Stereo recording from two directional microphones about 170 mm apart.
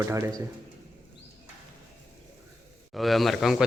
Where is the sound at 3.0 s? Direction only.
Centre (ahead or behind).